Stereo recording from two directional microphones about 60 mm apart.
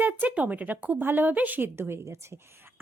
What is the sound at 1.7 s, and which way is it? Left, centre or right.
A woman's voice, right.